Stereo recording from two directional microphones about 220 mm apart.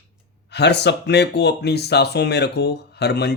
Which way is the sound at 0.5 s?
50° left (ahead or behind).